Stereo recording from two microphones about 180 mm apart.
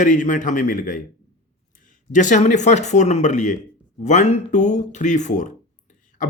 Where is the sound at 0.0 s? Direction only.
45° left (ahead or behind).